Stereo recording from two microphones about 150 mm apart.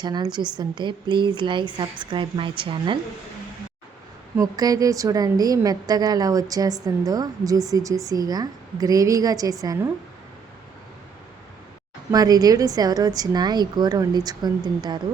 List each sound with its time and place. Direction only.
0.0 s a woman's voice: 30° right (ahead or behind)
4.4 s a woman's voice: 25° right (ahead or behind)
12.1 s a woman's voice: 25° right (ahead or behind)